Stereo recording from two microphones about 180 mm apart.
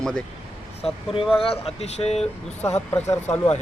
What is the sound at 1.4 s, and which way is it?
Speech, 35° left (ahead or behind).